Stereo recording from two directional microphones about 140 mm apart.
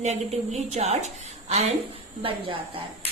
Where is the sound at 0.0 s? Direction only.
50° right (ahead or behind).